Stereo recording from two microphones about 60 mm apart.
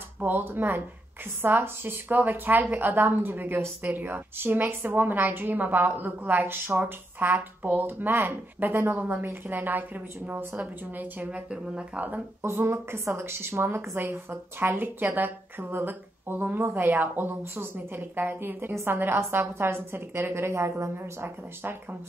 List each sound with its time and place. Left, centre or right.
0.2 s speech: right
6.8 s a woman's voice: right
12.4 s a woman's voice: right